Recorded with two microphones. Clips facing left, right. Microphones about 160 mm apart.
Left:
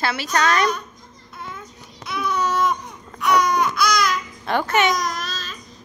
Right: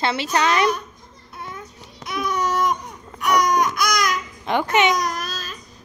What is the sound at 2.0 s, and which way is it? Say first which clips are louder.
Babbling: even; 15° right (ahead or behind).